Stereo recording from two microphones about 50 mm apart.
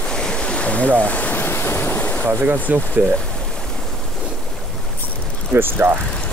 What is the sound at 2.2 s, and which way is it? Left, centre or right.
Speech, right.